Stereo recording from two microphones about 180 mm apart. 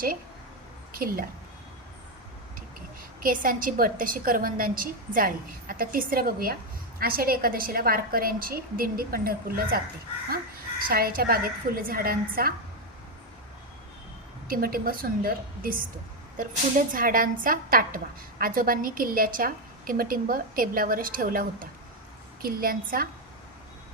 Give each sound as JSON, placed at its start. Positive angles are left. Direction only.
{"t": 0.9, "sound": "a woman's voice", "side_deg": -55}
{"t": 3.2, "sound": "a woman's voice", "side_deg": -50}
{"t": 14.4, "sound": "a woman's voice", "side_deg": -55}